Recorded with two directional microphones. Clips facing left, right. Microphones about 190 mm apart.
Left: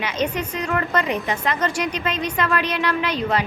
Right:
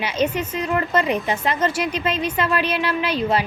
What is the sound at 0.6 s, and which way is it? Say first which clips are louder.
A woman's voice: right 2 dB; 25° right (ahead or behind).